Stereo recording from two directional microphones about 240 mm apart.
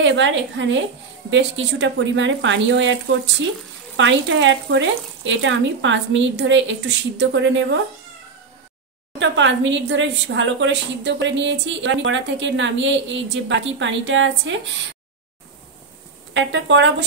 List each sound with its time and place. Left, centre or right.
0.0 s speech: right
9.2 s speech: right
16.3 s speech: right